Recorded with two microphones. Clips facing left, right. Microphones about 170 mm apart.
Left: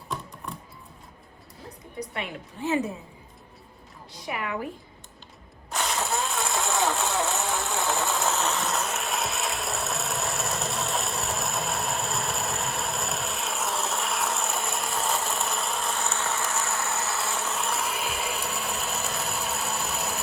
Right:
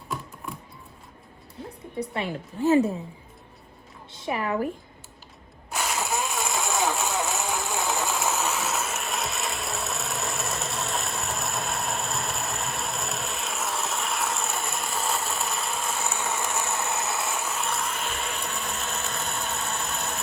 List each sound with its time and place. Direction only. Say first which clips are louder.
0.4 s a sound: right 1 dB; centre (ahead or behind)
2.0 s a woman's voice: right 4 dB; 30° right (ahead or behind)
4.3 s a woman's voice: right 4 dB; 30° right (ahead or behind)
5.7 s a sound: even; 5° right (ahead or behind)
6.0 s vehicle: right 1 dB; 15° right (ahead or behind)
8.4 s vehicle: even; centre (ahead or behind)
16.0 s insect: even; 15° right (ahead or behind)
17.5 s vehicle: even; centre (ahead or behind)